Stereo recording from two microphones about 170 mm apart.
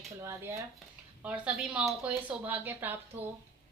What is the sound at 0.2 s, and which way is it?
A woman's voice, 15° right (ahead or behind).